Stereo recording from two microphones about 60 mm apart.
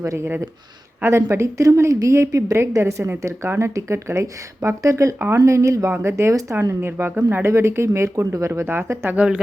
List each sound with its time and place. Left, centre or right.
0.0 s speech: right
1.0 s a woman's voice: right
5.9 s a woman's voice: right
8.6 s speech: right